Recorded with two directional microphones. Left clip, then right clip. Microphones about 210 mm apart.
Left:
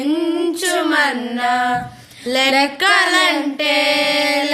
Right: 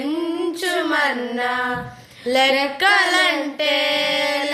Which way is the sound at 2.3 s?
15° left (ahead or behind).